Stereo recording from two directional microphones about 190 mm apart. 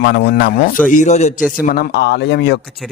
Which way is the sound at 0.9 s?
40° left (ahead or behind).